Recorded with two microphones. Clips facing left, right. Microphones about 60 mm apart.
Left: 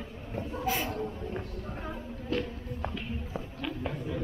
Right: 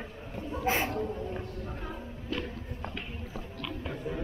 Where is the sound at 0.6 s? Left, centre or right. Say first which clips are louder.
Right 3 dB; right.